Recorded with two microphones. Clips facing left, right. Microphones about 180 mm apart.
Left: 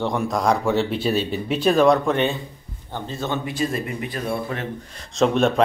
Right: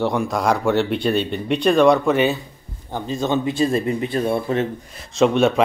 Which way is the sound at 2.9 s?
15° right (ahead or behind).